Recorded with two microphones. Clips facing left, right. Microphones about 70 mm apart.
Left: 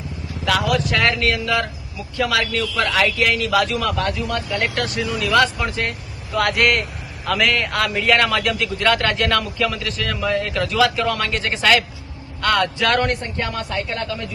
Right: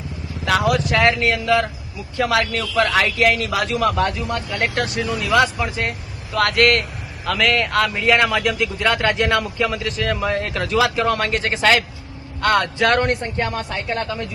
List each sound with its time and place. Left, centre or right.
0.4 s vehicle: right
2.1 s a man's voice: right
5.1 s a man's voice: centre; by 14.3 s right